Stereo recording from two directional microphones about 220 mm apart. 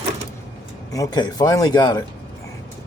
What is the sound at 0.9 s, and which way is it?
Speech, 15° left (ahead or behind).